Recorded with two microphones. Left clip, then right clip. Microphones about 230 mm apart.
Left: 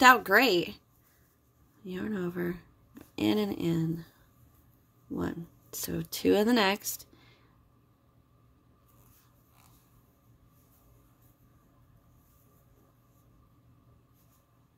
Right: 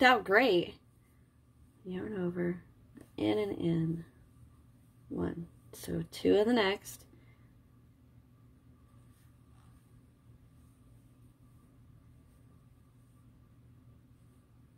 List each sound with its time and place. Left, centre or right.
0.0 s speech: left
1.9 s speech: left
5.1 s speech: left